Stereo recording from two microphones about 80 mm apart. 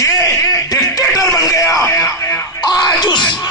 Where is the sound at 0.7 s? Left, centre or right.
Left.